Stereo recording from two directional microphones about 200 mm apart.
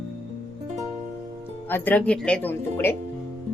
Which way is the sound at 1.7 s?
10° left (ahead or behind).